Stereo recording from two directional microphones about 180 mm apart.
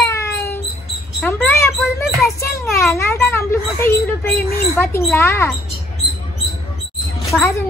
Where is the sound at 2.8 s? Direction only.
15° left (ahead or behind).